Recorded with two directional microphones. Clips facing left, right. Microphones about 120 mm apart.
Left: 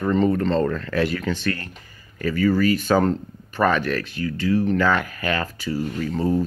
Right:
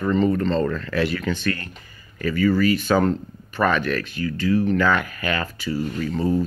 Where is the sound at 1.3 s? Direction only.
30° left (ahead or behind).